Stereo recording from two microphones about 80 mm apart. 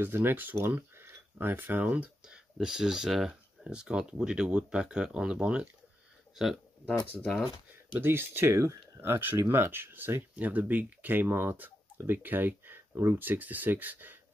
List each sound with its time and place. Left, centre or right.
0.0 s speech: right; by 7.4 s centre
8.0 s speech: right